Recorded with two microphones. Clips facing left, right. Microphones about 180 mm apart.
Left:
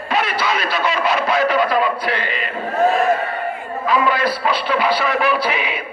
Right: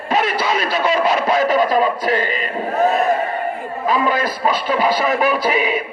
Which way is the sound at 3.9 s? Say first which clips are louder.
Even; 45° right (ahead or behind).